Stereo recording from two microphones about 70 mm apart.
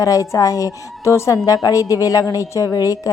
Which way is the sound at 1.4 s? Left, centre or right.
Left.